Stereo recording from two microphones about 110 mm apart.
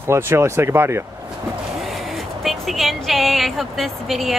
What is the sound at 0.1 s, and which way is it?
Speech, 25° right (ahead or behind).